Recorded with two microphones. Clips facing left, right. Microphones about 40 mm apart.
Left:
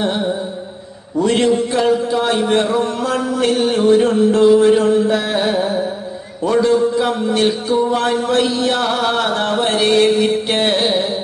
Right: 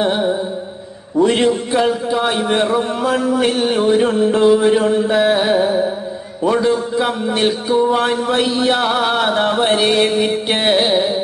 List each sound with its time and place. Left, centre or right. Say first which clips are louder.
0.0 s music: right 2 dB; centre
1.1 s a man's voice: right 1 dB; centre